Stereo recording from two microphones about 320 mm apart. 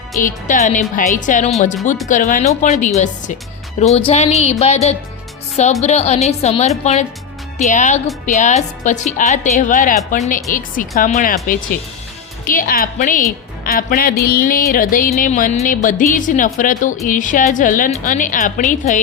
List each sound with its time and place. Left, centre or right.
0.2 s speech: left